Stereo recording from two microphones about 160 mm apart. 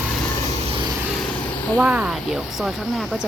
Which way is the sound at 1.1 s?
5° left (ahead or behind).